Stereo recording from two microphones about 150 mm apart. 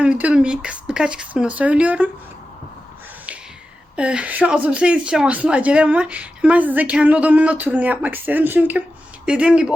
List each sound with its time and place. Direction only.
0.0 s speech: 10° right (ahead or behind)
3.9 s speech: 5° right (ahead or behind)